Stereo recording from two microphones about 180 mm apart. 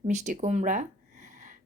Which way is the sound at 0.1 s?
40° right (ahead or behind).